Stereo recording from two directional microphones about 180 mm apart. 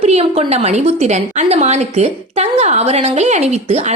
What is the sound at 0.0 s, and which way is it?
A woman's voice, 35° right (ahead or behind).